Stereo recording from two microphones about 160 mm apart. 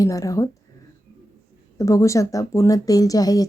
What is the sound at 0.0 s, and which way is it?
Speech, 20° left (ahead or behind).